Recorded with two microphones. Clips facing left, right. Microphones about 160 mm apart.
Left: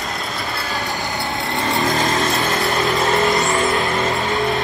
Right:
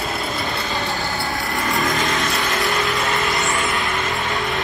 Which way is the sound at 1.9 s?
35° left (ahead or behind).